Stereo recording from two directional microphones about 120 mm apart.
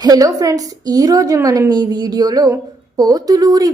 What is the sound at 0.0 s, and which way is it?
A woman's voice, 30° right (ahead or behind).